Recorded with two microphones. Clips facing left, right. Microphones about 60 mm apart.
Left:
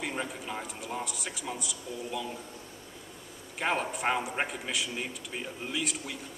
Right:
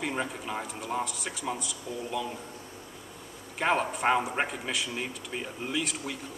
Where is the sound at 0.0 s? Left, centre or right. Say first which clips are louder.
Right 3 dB; centre.